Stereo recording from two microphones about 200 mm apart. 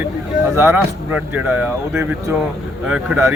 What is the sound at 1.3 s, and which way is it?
Speech, 5° right (ahead or behind).